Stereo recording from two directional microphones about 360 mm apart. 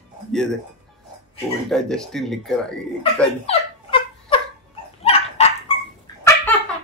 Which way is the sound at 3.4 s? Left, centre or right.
Centre.